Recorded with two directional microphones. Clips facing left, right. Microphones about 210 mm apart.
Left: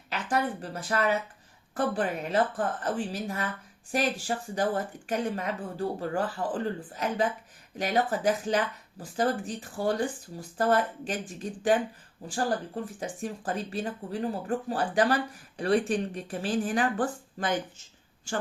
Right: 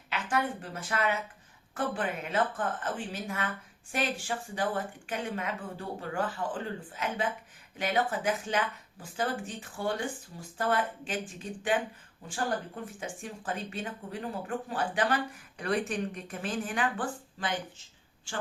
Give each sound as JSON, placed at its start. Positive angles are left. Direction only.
{"t": 0.1, "sound": "speech", "side_deg": 35}
{"t": 13.0, "sound": "speech", "side_deg": 40}